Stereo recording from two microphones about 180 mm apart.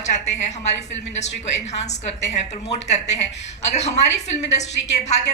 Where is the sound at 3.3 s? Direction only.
80° left.